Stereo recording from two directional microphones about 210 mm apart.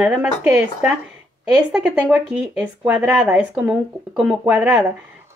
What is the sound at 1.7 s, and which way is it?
Speech, 5° right (ahead or behind).